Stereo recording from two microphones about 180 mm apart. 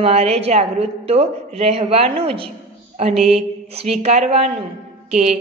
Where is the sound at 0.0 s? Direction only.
35° right (ahead or behind).